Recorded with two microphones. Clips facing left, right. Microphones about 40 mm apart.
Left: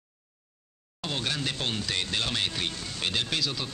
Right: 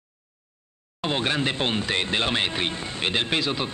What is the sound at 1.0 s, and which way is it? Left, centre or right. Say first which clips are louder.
Speech: right 7 dB; right.